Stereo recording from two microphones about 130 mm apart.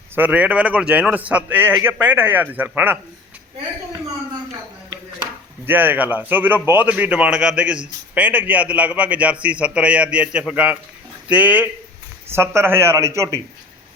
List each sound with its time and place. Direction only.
0.2 s a man's voice: 10° right (ahead or behind)
5.6 s a man's voice: 15° right (ahead or behind)